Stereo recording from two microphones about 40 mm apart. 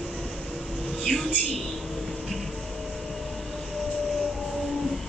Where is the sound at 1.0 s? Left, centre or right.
Centre.